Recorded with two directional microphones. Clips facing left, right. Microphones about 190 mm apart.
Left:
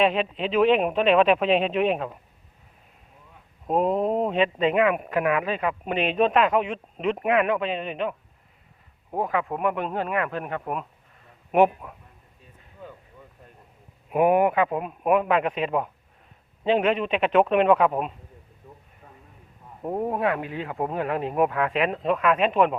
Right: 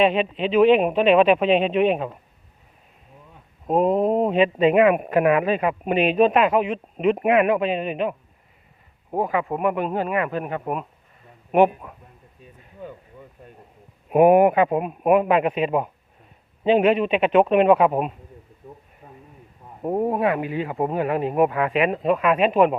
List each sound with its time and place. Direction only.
0.0 s speech: centre (ahead or behind)
3.7 s speech: 5° right (ahead or behind)
5.0 s speech: 35° right (ahead or behind)
5.5 s speech: 15° right (ahead or behind)
9.1 s speech: 5° right (ahead or behind)
14.1 s speech: 20° right (ahead or behind)
19.0 s a sound: 15° right (ahead or behind)
19.8 s speech: 10° right (ahead or behind)